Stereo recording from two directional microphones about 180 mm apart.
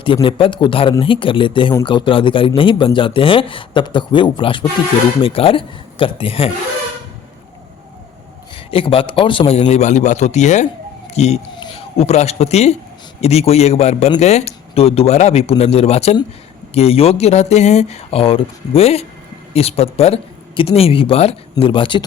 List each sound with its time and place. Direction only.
0.0 s speech: 30° left (ahead or behind)
8.5 s speech: 30° left (ahead or behind)